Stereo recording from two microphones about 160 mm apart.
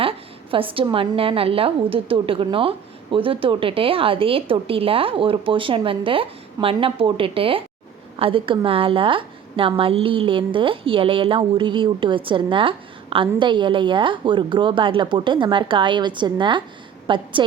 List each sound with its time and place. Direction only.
0.0 s a woman's voice: 35° right (ahead or behind)